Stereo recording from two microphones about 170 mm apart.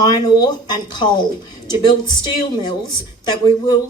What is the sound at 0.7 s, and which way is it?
Speech, 25° left (ahead or behind).